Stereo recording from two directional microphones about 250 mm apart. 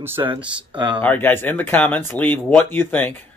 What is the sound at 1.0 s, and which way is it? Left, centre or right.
Speech, centre.